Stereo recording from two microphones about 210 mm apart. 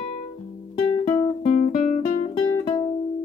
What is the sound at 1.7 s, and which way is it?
Guitar, 35° left (ahead or behind).